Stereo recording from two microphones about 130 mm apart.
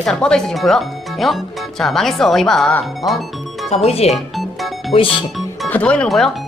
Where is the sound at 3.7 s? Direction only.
55° left (ahead or behind).